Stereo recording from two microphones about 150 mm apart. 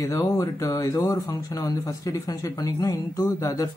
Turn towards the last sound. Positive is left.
turn(degrees=20)  # may be behind; listen again after turning